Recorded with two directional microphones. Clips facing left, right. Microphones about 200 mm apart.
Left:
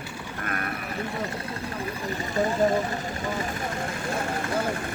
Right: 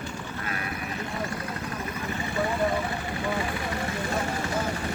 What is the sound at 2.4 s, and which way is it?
Speech, 45° left (ahead or behind).